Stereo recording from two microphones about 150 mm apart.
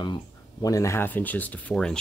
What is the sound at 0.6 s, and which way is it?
Speech, 20° left (ahead or behind).